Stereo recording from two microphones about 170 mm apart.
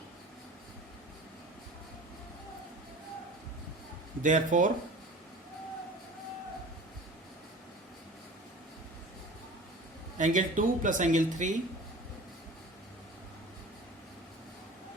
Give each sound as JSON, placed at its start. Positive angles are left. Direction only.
{"t": 4.2, "sound": "speech", "side_deg": -50}
{"t": 10.2, "sound": "speech", "side_deg": -50}